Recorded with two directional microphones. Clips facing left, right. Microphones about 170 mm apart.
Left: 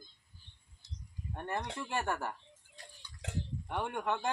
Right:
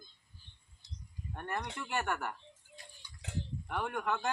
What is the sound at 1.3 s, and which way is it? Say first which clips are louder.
Speech: left 1 dB; 30° left (ahead or behind).